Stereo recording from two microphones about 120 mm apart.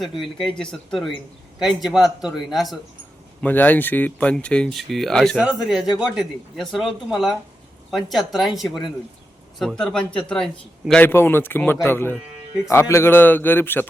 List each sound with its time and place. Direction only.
0.0 s a man's voice: centre (ahead or behind)
3.4 s a man's voice: 15° left (ahead or behind)
11.0 s speech: 20° left (ahead or behind)